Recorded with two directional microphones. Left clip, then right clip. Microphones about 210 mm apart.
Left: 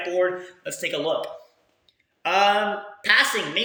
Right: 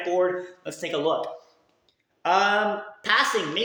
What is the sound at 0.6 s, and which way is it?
A woman's voice, 10° right (ahead or behind).